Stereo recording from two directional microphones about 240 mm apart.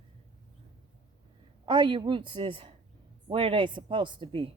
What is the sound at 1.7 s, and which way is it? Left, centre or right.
Speech, centre.